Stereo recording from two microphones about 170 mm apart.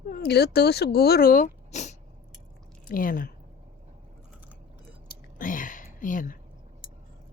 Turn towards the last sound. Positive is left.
turn(degrees=55)  # may be behind; listen again after turning